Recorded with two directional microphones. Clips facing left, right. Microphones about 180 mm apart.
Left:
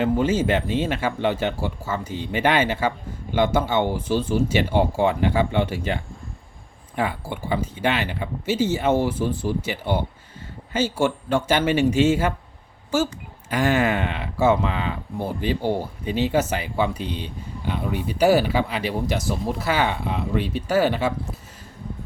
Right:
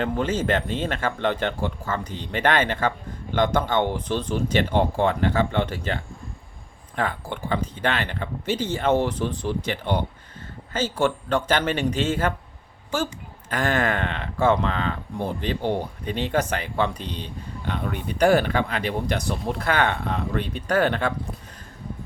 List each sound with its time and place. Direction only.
0.0 s speech: 10° left (ahead or behind)
13.5 s speech: 10° left (ahead or behind)